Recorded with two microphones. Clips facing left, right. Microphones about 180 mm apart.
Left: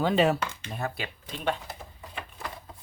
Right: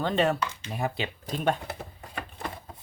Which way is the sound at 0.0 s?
5° left (ahead or behind).